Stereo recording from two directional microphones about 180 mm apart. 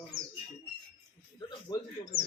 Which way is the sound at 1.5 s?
25° left (ahead or behind).